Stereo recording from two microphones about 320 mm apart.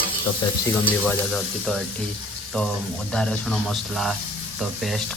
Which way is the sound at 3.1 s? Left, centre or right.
Centre.